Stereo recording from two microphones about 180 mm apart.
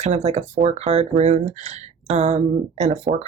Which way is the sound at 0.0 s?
40° right (ahead or behind).